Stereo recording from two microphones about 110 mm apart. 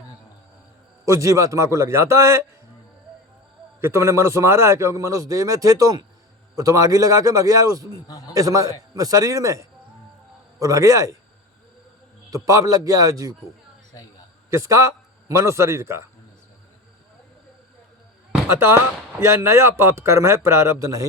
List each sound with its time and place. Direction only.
1.0 s a man's voice: 30° right (ahead or behind)
3.8 s a man's voice: 25° right (ahead or behind)
12.3 s a man's voice: 30° right (ahead or behind)
14.5 s a man's voice: 25° right (ahead or behind)
18.4 s a man's voice: 20° right (ahead or behind)